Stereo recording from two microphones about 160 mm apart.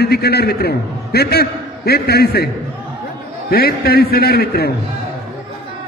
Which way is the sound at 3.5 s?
70° left (ahead or behind).